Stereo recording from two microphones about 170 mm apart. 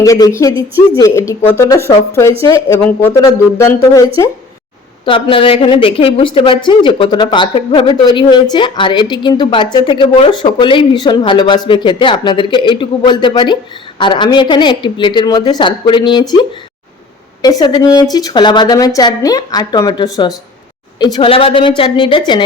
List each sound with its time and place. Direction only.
0.0 s a woman's voice: 20° left (ahead or behind)
5.0 s a woman's voice: 30° left (ahead or behind)